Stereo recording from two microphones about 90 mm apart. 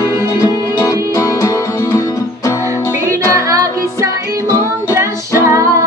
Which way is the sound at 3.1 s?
35° right (ahead or behind).